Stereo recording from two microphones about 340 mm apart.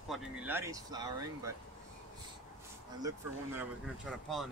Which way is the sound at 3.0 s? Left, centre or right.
Centre.